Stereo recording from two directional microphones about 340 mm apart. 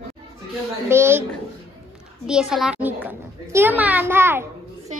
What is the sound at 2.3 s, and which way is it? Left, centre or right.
A child's voice, centre.